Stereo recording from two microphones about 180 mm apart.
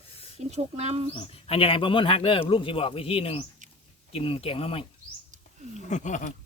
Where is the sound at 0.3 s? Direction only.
35° right (ahead or behind).